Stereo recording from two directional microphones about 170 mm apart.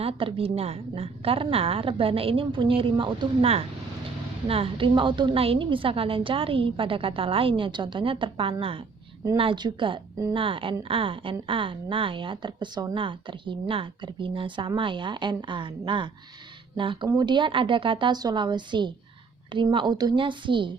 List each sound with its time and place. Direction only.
0.0 s a woman's voice: 30° right (ahead or behind)